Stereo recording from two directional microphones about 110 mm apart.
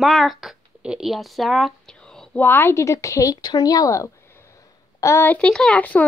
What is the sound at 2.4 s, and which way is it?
A woman's voice, 20° left (ahead or behind).